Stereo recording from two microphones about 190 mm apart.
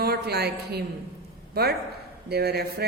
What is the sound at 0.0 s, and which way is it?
Speech, 55° right (ahead or behind).